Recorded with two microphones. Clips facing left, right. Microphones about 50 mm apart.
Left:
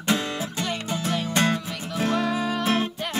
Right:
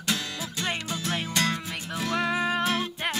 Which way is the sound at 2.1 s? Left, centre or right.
Right.